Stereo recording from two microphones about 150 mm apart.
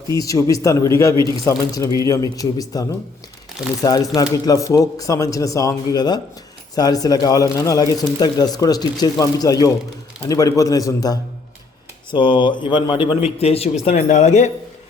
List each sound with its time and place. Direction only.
0.1 s speech: 20° left (ahead or behind)
3.8 s speech: 25° left (ahead or behind); by 13.7 s 40° left (ahead or behind)
13.9 s speech: 50° left (ahead or behind)